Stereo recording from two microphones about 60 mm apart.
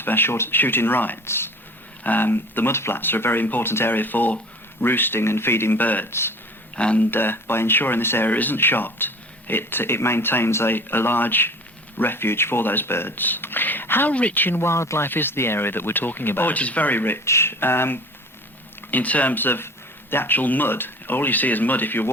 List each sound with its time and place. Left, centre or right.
0.0 s speech: left
7.1 s speech: left
14.1 s speech: left
16.6 s speech: left
17.2 s speech: left